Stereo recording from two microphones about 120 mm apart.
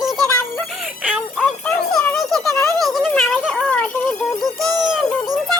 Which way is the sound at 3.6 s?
10° left (ahead or behind).